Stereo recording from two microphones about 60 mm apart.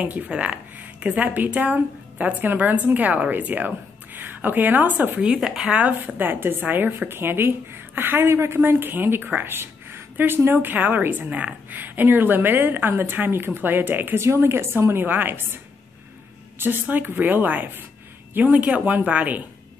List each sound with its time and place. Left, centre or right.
0.0 s a woman's voice: right
5.3 s speech: centre
5.7 s a woman's voice: right
11.2 s a woman's voice: right
14.2 s a woman's voice: right
15.0 s a woman's voice: right
16.5 s a woman's voice: right